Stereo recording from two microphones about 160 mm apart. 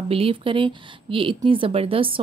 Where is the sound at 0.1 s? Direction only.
35° right (ahead or behind).